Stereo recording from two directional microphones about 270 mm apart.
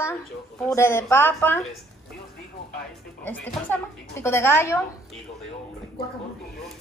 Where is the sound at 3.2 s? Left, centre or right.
Centre.